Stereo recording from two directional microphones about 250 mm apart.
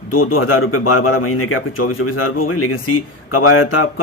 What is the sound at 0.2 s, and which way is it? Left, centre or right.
Speech, left.